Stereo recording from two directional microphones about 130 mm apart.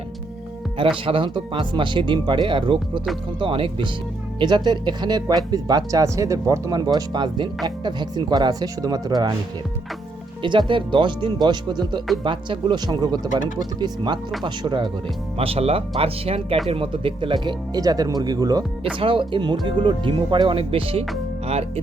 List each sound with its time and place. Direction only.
0.8 s speech: 40° right (ahead or behind)
10.4 s speech: 40° right (ahead or behind)
15.4 s speech: 50° right (ahead or behind)
17.7 s speech: 30° right (ahead or behind)
18.9 s speech: 40° right (ahead or behind)